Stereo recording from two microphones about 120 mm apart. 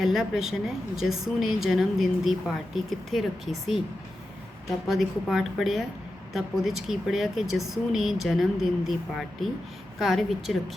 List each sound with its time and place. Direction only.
0.0 s a woman's voice: centre (ahead or behind)
4.9 s a woman's voice: centre (ahead or behind)